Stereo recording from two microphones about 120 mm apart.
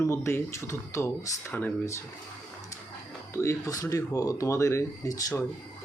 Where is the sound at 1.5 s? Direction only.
15° left (ahead or behind).